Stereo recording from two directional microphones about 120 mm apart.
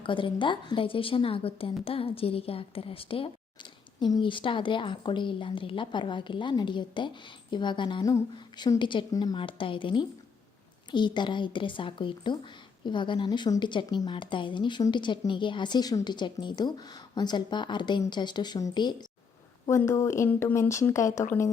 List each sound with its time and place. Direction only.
0.0 s a woman's voice: 45° left (ahead or behind)
19.6 s speech: 25° left (ahead or behind)